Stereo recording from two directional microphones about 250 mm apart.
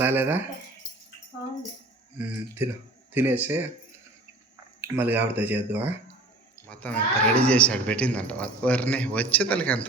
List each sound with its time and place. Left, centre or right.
0.0 s speech: centre
3.1 s speech: centre
4.8 s speech: centre
6.7 s speech: centre